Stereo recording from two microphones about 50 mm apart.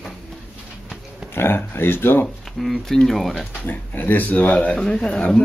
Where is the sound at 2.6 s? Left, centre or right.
Centre.